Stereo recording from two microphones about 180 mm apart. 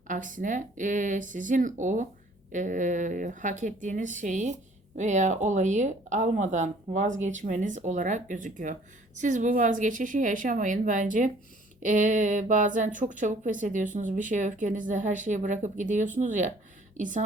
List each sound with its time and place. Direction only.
0.1 s speech: 45° right (ahead or behind)